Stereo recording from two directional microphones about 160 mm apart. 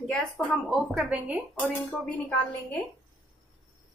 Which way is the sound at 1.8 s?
10° left (ahead or behind).